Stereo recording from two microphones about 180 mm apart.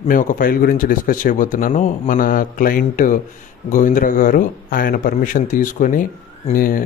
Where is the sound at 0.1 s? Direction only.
50° left (ahead or behind).